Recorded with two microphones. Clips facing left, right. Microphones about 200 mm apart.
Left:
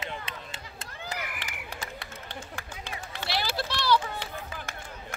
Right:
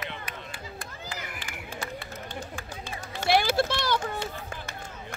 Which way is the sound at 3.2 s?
50° right (ahead or behind).